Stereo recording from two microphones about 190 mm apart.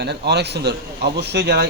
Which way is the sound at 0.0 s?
60° right (ahead or behind).